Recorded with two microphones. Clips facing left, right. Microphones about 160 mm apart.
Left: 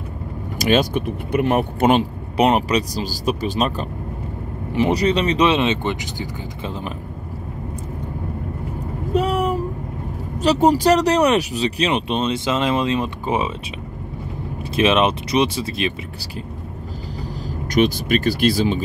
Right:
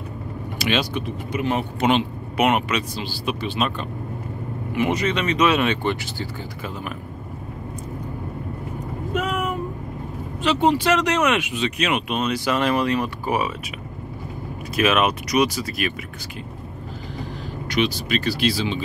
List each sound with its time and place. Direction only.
0.6 s speech: 45° left (ahead or behind); by 6.7 s 15° left (ahead or behind)
9.1 s a sound: 35° left (ahead or behind)
10.4 s speech: 40° left (ahead or behind); by 13.5 s 25° left (ahead or behind)
14.8 s speech: 25° left (ahead or behind)
17.7 s speech: 50° left (ahead or behind)